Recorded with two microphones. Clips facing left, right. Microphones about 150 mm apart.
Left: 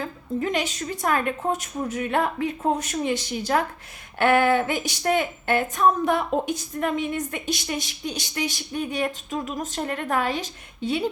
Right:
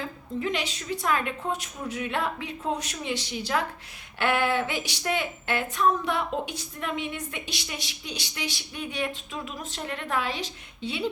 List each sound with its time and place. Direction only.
0.0 s speech: 45° left (ahead or behind)